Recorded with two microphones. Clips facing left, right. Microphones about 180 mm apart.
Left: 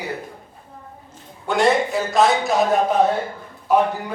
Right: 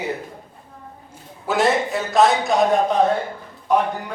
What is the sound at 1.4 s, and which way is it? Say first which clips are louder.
A man's voice: left 1 dB; centre (ahead or behind).